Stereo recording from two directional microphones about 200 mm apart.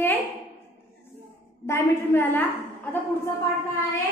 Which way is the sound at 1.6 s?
10° left (ahead or behind).